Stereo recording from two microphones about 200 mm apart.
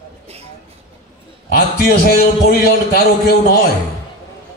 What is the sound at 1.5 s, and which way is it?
A man's voice, 50° left (ahead or behind).